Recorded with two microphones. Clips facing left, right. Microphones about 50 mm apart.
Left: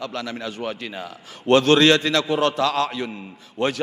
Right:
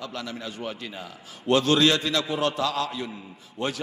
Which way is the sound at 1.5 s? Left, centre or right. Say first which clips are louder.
Left 5 dB; left.